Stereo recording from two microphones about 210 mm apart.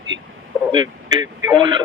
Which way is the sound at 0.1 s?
65° right (ahead or behind).